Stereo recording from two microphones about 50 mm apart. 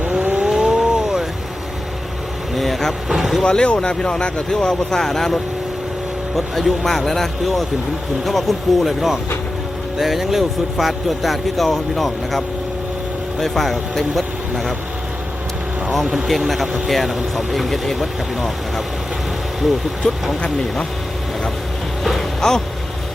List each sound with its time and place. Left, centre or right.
0.1 s vehicle: right
0.4 s vehicle: centre
2.6 s vehicle: centre
3.1 s speech: centre
3.4 s speech: centre
13.4 s speech: centre
16.1 s speech: centre
20.0 s speech: centre
22.0 s vehicle: centre